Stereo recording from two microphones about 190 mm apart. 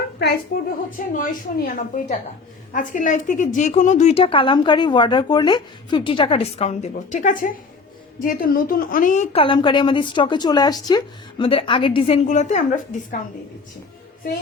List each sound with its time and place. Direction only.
0.5 s a woman's voice: 55° left (ahead or behind)
9.3 s a woman's voice: 25° left (ahead or behind)